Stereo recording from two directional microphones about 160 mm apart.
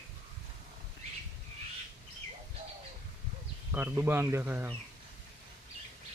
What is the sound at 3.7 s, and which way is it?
Speech, 10° right (ahead or behind).